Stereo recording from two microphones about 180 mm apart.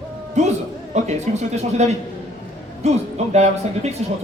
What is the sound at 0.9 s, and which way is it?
A man's voice, 40° right (ahead or behind).